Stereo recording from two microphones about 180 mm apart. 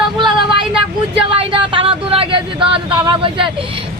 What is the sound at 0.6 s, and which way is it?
Speech, 5° right (ahead or behind).